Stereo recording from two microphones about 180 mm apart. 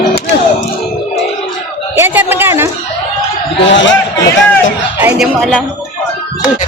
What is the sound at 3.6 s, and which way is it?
Speech, 90° left.